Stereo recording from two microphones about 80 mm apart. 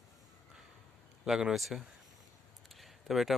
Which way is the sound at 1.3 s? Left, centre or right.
Centre.